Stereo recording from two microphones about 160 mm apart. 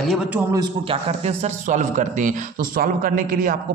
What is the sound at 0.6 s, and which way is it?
A man's voice, 35° right (ahead or behind).